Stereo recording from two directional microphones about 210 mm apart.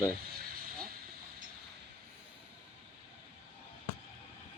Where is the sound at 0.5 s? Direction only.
45° right (ahead or behind).